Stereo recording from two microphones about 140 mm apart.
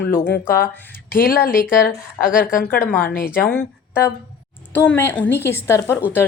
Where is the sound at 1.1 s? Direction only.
90° left.